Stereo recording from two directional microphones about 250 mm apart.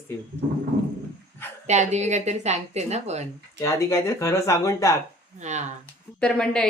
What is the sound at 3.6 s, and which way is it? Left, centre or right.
Speech, centre.